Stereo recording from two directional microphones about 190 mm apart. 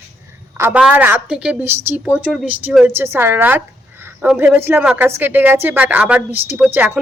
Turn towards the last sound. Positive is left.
turn(degrees=-10)  # may be behind; listen again after turning